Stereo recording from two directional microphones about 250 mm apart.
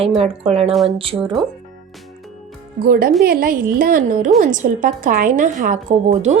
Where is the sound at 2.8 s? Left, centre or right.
Right.